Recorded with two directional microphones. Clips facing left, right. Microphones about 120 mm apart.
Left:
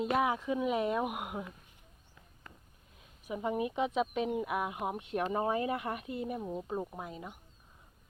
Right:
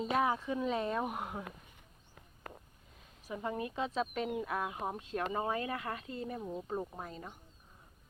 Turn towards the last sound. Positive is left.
turn(degrees=10)  # may be behind; listen again after turning